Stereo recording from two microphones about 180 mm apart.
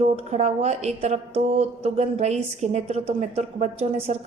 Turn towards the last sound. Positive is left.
turn(degrees=-35)  # may be behind; listen again after turning